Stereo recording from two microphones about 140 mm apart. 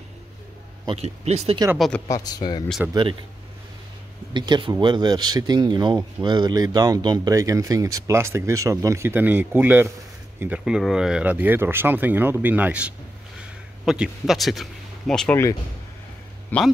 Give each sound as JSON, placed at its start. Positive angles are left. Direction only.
{"t": 1.0, "sound": "speech", "side_deg": -50}
{"t": 1.8, "sound": "speech", "side_deg": 10}
{"t": 2.0, "sound": "a man's voice", "side_deg": 25}
{"t": 2.9, "sound": "speech", "side_deg": -35}
{"t": 4.3, "sound": "speech", "side_deg": -35}
{"t": 16.5, "sound": "speech", "side_deg": 15}